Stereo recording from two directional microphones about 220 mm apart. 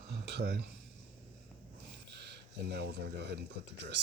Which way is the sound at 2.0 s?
50° right (ahead or behind).